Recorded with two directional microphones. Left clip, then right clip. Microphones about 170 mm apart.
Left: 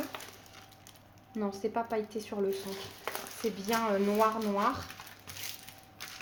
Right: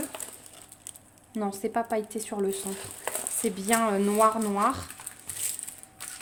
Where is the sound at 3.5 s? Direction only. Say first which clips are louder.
Right 5 dB; 90° right.